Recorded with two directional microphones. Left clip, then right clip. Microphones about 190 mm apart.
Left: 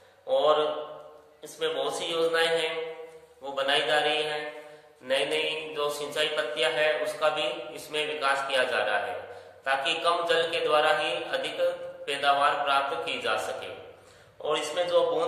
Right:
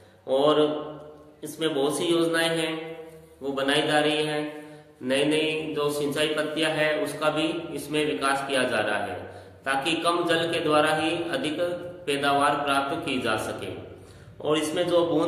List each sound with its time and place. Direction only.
0.3 s mantra: 15° right (ahead or behind)
1.4 s a man's voice: 15° right (ahead or behind)